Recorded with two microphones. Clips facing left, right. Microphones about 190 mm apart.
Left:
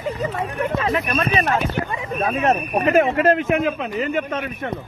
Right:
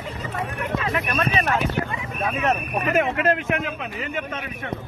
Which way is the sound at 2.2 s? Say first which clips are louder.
Left 3 dB; 35° left (ahead or behind).